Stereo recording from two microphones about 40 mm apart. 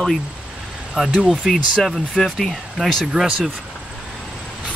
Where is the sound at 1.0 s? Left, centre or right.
Centre.